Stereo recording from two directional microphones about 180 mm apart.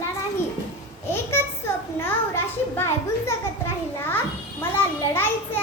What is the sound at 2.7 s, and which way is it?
Speech, 15° left (ahead or behind).